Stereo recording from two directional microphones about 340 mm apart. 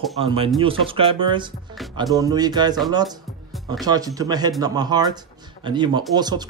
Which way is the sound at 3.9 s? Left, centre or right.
Centre.